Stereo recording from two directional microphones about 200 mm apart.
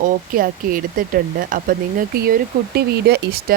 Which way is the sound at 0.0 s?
45° right (ahead or behind).